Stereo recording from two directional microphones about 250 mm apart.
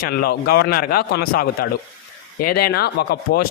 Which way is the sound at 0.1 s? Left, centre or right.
Left.